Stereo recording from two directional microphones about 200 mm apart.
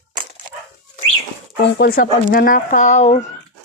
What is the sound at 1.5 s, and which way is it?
Speech, 50° left (ahead or behind).